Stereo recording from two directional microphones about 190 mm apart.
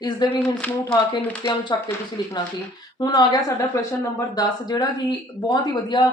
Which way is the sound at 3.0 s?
20° left (ahead or behind).